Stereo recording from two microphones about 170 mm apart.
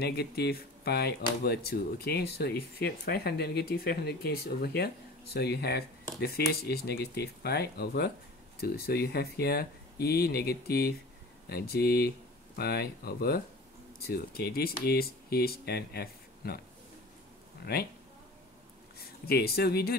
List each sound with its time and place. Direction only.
0.0 s speech: 70° left (ahead or behind)
17.7 s speech: 65° left (ahead or behind)
19.2 s speech: 65° left (ahead or behind)